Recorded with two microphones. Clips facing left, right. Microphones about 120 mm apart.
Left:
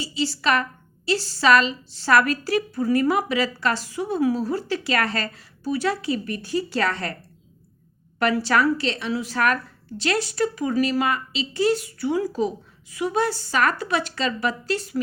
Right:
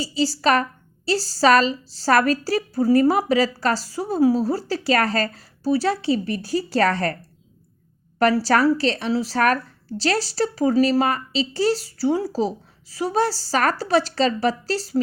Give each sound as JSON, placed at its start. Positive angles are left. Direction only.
{"t": 0.0, "sound": "a woman's voice", "side_deg": -35}
{"t": 8.2, "sound": "a woman's voice", "side_deg": -35}